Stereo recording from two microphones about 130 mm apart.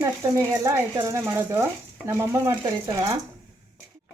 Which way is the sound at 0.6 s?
20° right (ahead or behind).